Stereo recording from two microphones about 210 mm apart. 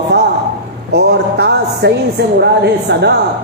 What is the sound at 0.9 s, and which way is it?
A man's voice, 50° right (ahead or behind).